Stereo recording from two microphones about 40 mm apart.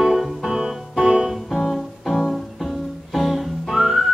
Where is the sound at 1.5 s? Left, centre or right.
Centre.